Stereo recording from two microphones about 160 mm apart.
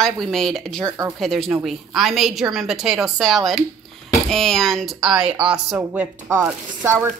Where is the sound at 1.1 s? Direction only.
Centre (ahead or behind).